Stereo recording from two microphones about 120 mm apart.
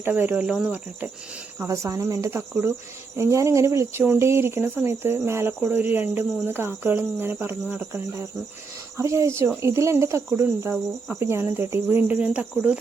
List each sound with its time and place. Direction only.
0.0 s speech: 15° right (ahead or behind)
1.5 s speech: 25° right (ahead or behind)